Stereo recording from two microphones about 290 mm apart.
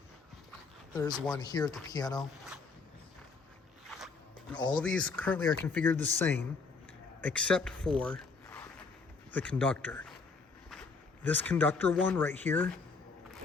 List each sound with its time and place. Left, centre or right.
1.1 s speech: centre
1.4 s speech: centre
3.8 s walk: centre
4.5 s speech: centre
4.8 s speech: centre
11.2 s speech: centre